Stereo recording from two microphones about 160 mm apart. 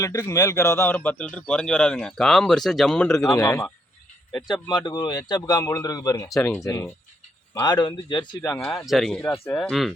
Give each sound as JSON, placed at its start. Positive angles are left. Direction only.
{"t": 0.0, "sound": "a man's voice", "side_deg": 20}
{"t": 3.3, "sound": "a man's voice", "side_deg": 15}
{"t": 8.9, "sound": "speech", "side_deg": 0}
{"t": 9.1, "sound": "a man's voice", "side_deg": 15}